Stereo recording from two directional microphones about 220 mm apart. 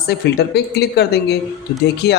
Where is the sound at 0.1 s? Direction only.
45° left (ahead or behind).